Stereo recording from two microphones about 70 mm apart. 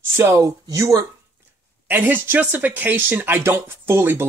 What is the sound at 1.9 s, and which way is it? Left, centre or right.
Speech, right.